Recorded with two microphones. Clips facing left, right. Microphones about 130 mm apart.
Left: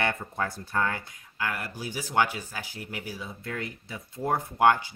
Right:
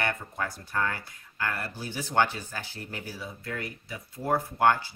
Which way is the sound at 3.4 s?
25° left (ahead or behind).